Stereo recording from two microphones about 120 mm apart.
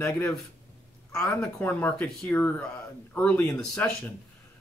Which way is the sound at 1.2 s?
10° left (ahead or behind).